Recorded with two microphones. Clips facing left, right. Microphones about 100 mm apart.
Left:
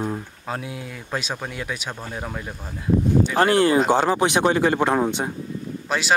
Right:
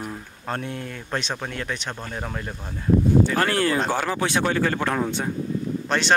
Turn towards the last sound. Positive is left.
turn(degrees=5)  # may be behind; listen again after turning